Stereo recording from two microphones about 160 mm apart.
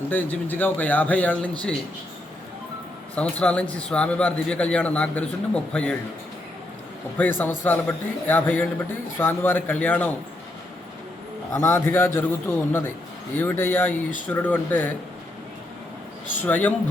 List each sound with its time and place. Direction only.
0.1 s a man's voice: 10° left (ahead or behind)
3.2 s a man's voice: 10° left (ahead or behind)
7.2 s a man's voice: 10° left (ahead or behind)
11.5 s a man's voice: 20° left (ahead or behind)
16.4 s a man's voice: 10° left (ahead or behind)